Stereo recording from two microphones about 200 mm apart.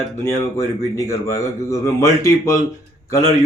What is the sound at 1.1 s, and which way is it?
Speech, 15° left (ahead or behind).